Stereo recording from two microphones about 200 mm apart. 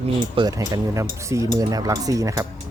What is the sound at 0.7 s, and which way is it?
Speech, 15° right (ahead or behind).